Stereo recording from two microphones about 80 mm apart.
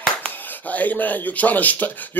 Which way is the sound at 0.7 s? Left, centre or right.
Centre.